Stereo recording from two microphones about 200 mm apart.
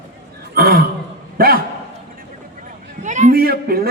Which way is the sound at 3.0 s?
35° right (ahead or behind).